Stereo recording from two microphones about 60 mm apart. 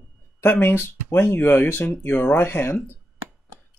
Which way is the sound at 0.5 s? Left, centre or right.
Left.